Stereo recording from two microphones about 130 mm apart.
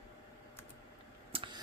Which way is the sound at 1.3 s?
40° right (ahead or behind).